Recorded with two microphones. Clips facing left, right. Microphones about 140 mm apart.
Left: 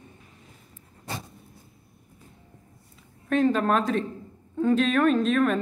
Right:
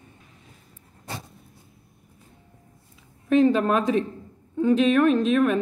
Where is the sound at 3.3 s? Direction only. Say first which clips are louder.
Right 3 dB; 5° right (ahead or behind).